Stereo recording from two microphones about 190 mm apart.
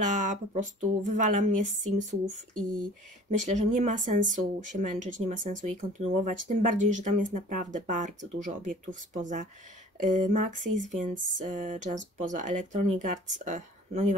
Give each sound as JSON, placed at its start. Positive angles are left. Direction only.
{"t": 0.0, "sound": "speech", "side_deg": -40}